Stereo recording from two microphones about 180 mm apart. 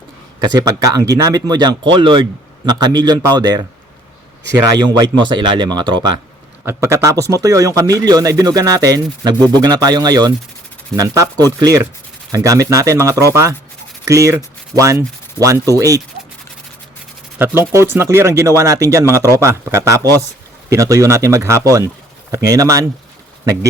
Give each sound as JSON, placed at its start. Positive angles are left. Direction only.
{"t": 0.4, "sound": "a man's voice", "side_deg": -20}
{"t": 6.7, "sound": "a man's voice", "side_deg": -15}
{"t": 17.3, "sound": "a man's voice", "side_deg": -10}